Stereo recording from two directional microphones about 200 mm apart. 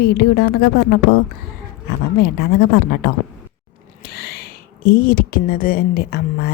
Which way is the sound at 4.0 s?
55° left (ahead or behind).